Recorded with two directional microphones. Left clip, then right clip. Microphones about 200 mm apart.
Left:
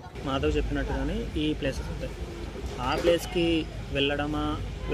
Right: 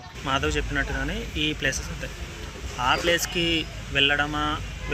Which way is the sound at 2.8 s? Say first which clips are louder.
Right 3 dB; centre (ahead or behind).